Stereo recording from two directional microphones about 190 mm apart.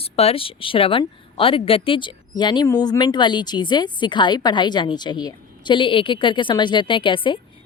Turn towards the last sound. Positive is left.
turn(degrees=25)  # may be behind; listen again after turning